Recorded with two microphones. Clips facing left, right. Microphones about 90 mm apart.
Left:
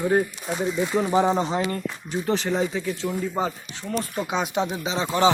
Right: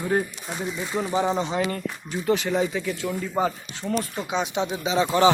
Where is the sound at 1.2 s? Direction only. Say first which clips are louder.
Left 1 dB; 35° left (ahead or behind).